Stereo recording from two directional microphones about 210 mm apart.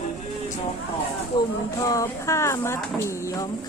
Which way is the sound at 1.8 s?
15° left (ahead or behind).